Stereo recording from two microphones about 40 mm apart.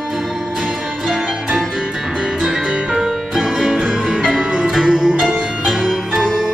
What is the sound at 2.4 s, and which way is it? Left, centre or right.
Music, centre.